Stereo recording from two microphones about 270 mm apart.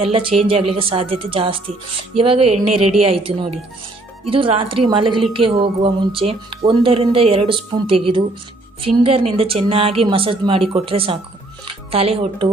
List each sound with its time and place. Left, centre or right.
0.0 s speech: centre
2.4 s speech: right
3.0 s a woman's voice: right